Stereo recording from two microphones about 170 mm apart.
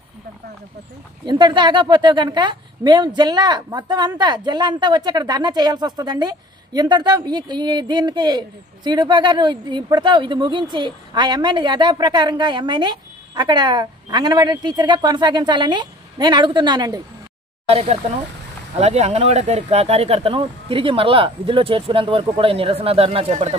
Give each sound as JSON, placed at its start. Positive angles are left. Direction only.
{"t": 1.2, "sound": "speech", "side_deg": -25}
{"t": 17.6, "sound": "speech", "side_deg": -35}